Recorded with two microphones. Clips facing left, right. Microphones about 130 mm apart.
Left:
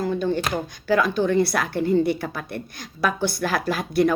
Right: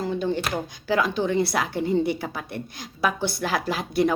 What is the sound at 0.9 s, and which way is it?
A woman's voice, 20° right (ahead or behind).